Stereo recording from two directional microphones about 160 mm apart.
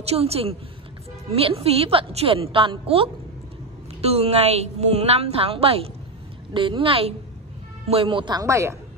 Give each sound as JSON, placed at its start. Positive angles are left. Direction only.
{"t": 0.0, "sound": "a woman's voice", "side_deg": -40}